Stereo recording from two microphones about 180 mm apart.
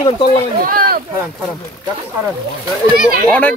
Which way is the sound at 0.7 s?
55° right (ahead or behind).